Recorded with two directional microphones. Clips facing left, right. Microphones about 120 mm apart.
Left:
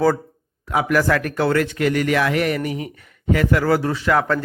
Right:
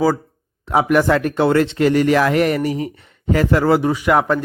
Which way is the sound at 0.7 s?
25° right (ahead or behind).